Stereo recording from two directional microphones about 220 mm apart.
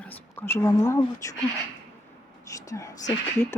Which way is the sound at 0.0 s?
10° left (ahead or behind).